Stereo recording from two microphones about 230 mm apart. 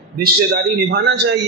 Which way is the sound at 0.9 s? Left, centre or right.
Right.